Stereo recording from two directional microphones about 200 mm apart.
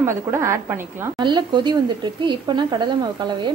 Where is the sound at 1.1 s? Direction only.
20° right (ahead or behind).